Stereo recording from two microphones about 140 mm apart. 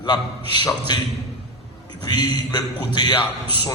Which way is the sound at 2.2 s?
30° left (ahead or behind).